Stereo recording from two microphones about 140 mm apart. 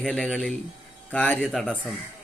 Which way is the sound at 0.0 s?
5° left (ahead or behind).